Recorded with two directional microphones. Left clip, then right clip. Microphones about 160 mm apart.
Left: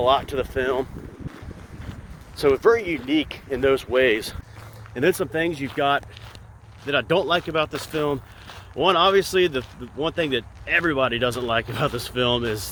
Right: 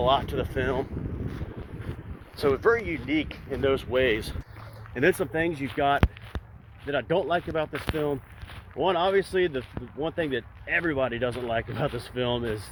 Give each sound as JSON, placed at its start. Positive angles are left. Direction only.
{"t": 0.0, "sound": "speech", "side_deg": 35}
{"t": 2.4, "sound": "speech", "side_deg": 50}
{"t": 3.8, "sound": "speech", "side_deg": 30}
{"t": 4.9, "sound": "speech", "side_deg": -10}